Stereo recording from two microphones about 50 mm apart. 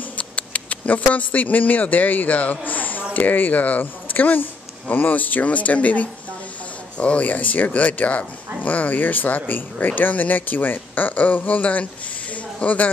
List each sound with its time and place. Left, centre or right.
0.2 s speech: left